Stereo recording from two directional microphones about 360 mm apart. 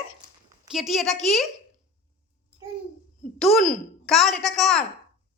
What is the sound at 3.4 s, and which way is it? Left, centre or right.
A woman's voice, centre.